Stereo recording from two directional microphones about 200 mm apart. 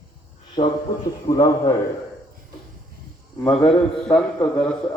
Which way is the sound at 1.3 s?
15° left (ahead or behind).